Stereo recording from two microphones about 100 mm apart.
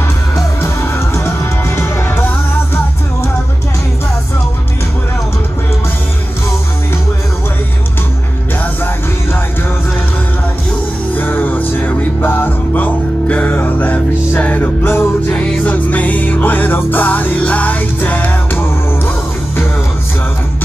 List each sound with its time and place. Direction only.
0.6 s music: 25° left (ahead or behind)
11.1 s music: 20° left (ahead or behind)